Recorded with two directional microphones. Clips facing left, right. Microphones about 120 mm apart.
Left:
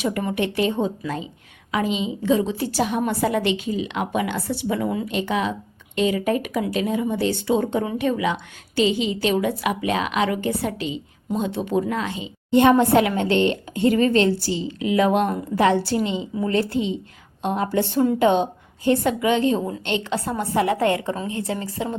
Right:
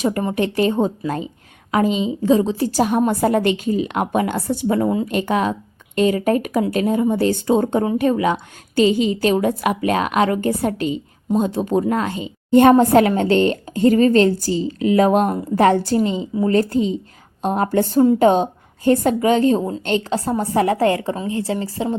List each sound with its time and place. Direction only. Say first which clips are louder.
0.2 s a woman's voice: right 4 dB; 35° right (ahead or behind)